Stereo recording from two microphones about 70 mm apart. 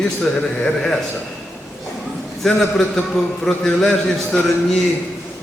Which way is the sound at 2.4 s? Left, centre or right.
Centre.